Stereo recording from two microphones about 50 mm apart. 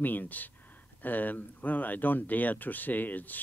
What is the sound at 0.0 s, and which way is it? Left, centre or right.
Speech, left.